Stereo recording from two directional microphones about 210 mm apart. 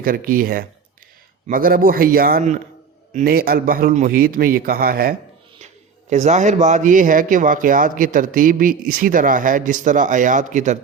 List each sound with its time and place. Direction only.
0.0 s a man's voice: 40° right (ahead or behind)
5.6 s speech: 35° right (ahead or behind)